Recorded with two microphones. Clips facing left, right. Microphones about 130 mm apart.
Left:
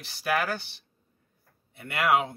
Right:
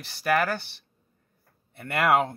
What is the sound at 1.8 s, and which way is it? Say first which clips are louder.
Speech: right 2 dB; 50° right (ahead or behind).